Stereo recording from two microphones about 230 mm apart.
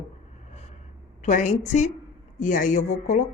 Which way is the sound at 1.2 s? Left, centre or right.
Left.